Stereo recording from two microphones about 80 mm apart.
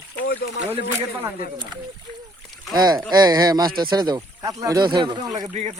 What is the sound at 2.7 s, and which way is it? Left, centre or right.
Speech, right.